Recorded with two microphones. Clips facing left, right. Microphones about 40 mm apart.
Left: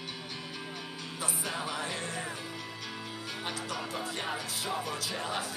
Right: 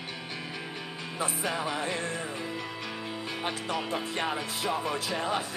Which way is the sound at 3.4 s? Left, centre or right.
Right.